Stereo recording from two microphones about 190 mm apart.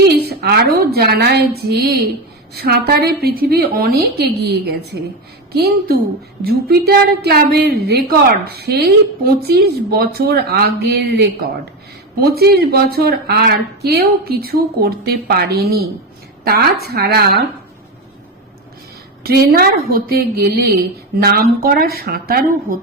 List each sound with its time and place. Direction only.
0.3 s a woman's voice: 55° right (ahead or behind)
19.2 s a woman's voice: 55° right (ahead or behind)